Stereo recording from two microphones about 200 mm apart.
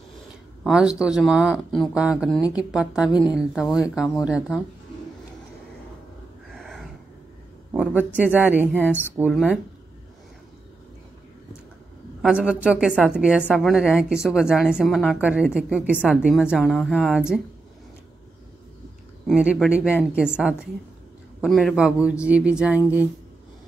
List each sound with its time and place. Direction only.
0.7 s a woman's voice: 5° right (ahead or behind)
3.1 s speech: 20° left (ahead or behind)
3.9 s a woman's voice: centre (ahead or behind)
6.5 s a sound: centre (ahead or behind)
7.7 s speech: 5° right (ahead or behind)
8.7 s a woman's voice: 10° left (ahead or behind)
12.2 s a man's voice: 5° right (ahead or behind)
19.2 s a woman's voice: 5° right (ahead or behind)